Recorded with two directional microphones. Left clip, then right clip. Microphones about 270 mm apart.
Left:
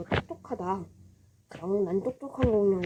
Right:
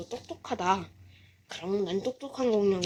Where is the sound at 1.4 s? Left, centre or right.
Right.